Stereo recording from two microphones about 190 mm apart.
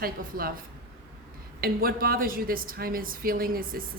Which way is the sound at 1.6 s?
50° right (ahead or behind).